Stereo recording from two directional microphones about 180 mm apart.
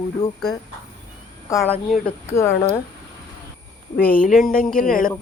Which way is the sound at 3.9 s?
55° left (ahead or behind).